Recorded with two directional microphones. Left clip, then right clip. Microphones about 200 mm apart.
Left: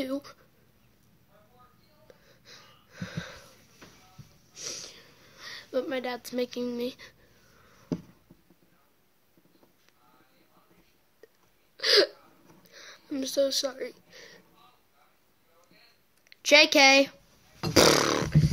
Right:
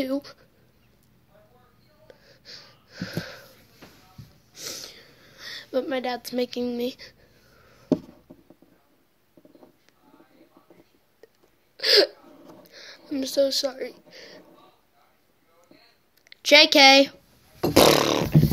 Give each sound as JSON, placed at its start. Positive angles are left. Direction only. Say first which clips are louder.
{"t": 0.0, "sound": "speech", "louder": "right 5 dB", "side_deg": 10}
{"t": 2.0, "sound": "wheeze", "louder": "right 7 dB", "side_deg": 10}
{"t": 4.6, "sound": "a sound", "louder": "right 2 dB", "side_deg": 0}
{"t": 11.2, "sound": "burping", "louder": "right 3 dB", "side_deg": 10}
{"t": 11.7, "sound": "hiccup", "louder": "right 4 dB", "side_deg": 10}
{"t": 12.6, "sound": "a sound", "louder": "right 3 dB", "side_deg": 10}
{"t": 16.3, "sound": "a woman's voice", "louder": "right 4 dB", "side_deg": 5}
{"t": 17.7, "sound": "roaring cats", "louder": "right 4 dB", "side_deg": 15}